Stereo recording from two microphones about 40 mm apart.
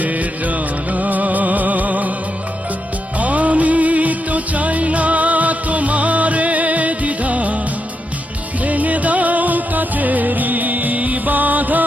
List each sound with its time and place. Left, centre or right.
0.0 s music: right
3.2 s music: right
8.6 s music: right